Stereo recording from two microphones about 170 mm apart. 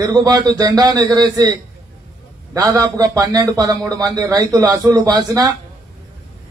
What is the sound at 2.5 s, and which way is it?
A man's voice, 20° right (ahead or behind).